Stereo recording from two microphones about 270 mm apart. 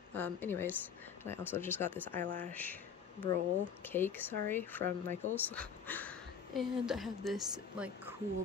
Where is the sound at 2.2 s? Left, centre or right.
Right.